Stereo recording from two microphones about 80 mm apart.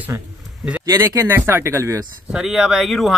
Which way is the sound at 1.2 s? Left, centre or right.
Right.